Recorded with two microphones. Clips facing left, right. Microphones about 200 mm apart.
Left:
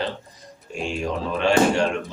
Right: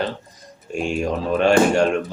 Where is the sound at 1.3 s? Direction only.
45° right (ahead or behind).